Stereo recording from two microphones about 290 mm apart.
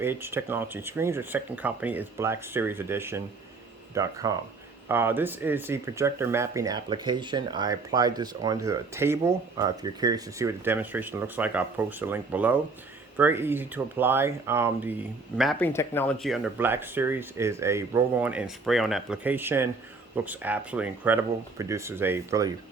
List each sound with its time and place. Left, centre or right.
0.0 s speech: centre